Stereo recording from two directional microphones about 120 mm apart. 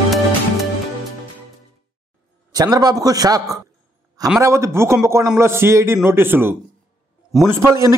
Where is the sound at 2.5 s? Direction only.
30° right (ahead or behind).